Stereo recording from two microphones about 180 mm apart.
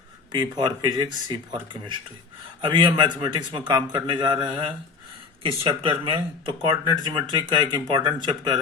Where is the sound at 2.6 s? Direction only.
25° right (ahead or behind).